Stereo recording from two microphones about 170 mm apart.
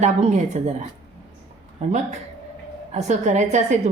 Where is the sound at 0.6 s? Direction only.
45° right (ahead or behind).